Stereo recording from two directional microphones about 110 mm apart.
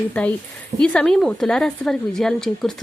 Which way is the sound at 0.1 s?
15° left (ahead or behind).